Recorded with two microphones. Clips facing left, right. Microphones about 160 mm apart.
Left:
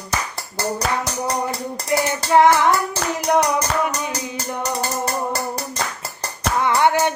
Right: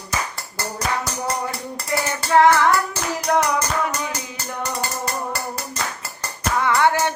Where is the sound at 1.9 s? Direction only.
20° left (ahead or behind).